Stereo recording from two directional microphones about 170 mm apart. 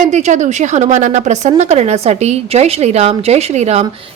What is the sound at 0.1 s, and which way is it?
A woman's voice, 45° right (ahead or behind).